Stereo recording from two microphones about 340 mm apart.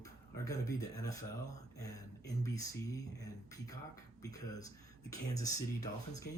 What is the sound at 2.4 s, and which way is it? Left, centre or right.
Speech, centre.